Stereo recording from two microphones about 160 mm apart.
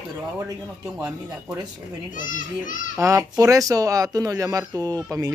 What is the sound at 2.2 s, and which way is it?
Speech, 55° left (ahead or behind).